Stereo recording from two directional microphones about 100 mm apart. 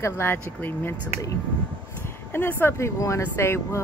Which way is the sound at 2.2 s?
20° left (ahead or behind).